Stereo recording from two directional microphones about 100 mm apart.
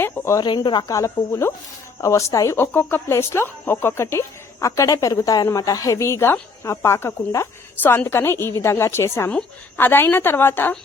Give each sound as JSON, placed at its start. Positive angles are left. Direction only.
{"t": 0.0, "sound": "speech", "side_deg": 30}
{"t": 0.4, "sound": "speech", "side_deg": 50}
{"t": 2.6, "sound": "speech", "side_deg": 20}